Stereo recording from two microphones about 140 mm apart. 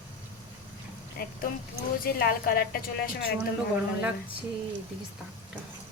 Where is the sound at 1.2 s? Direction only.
90° left.